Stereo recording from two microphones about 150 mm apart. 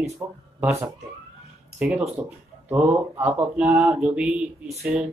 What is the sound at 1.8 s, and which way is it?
Speech, 5° right (ahead or behind).